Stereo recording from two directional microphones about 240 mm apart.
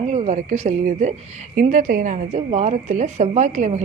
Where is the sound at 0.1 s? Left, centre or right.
Right.